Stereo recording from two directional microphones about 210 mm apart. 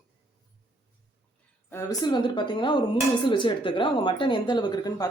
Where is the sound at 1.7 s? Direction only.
20° left (ahead or behind).